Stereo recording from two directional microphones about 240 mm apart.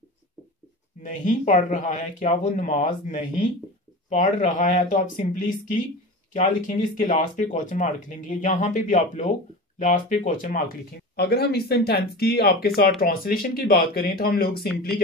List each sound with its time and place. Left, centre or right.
1.0 s speech: left